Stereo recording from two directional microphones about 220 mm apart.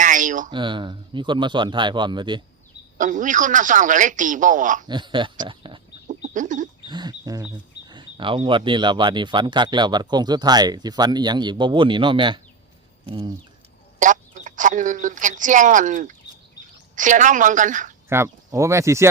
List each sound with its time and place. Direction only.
0.0 s a sound: 35° right (ahead or behind)
0.5 s speech: 20° right (ahead or behind)
3.0 s speech: 35° right (ahead or behind)
4.9 s speech: 20° right (ahead or behind)
6.1 s chicken: 35° right (ahead or behind)
6.8 s speech: 20° right (ahead or behind)
14.0 s speech: 35° right (ahead or behind)
18.1 s speech: 10° right (ahead or behind)